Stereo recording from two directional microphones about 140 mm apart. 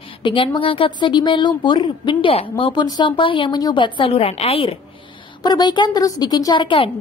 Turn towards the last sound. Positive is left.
turn(degrees=35)  # may be behind; listen again after turning